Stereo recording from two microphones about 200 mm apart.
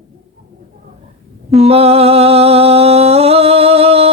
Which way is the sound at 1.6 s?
30° right (ahead or behind).